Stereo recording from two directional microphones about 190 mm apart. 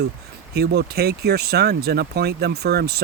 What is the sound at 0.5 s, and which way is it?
Speech, 60° right (ahead or behind).